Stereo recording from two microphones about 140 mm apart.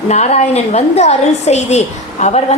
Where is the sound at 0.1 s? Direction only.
50° left (ahead or behind).